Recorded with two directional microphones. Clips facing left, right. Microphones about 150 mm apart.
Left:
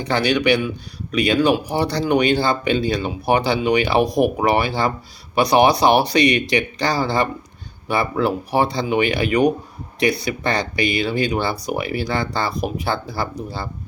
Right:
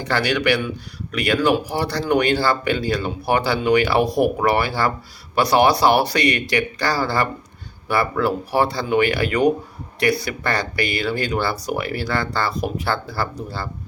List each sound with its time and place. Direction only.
0.0 s speech: 20° left (ahead or behind)